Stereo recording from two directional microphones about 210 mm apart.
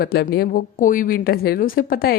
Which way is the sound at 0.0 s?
45° left (ahead or behind).